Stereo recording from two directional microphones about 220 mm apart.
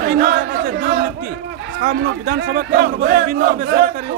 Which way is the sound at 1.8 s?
45° right (ahead or behind).